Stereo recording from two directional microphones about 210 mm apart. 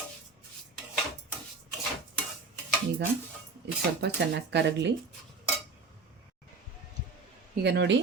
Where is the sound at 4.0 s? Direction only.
55° right (ahead or behind).